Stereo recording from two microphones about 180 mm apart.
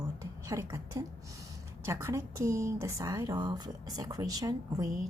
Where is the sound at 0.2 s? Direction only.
15° right (ahead or behind).